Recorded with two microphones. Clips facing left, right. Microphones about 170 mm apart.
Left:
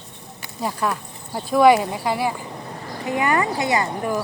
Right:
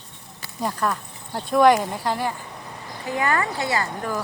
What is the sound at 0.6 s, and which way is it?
Speech, 5° left (ahead or behind).